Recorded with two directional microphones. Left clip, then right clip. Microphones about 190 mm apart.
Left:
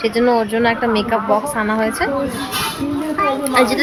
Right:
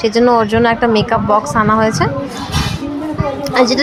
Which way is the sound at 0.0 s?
15° right (ahead or behind).